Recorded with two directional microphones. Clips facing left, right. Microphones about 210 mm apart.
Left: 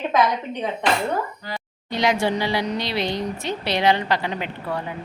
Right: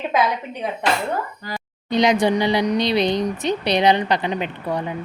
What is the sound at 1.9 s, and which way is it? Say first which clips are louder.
A woman's voice: right 4 dB; 20° right (ahead or behind).